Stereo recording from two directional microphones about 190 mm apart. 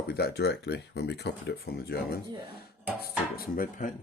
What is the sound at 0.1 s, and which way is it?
A man's voice, 55° left (ahead or behind).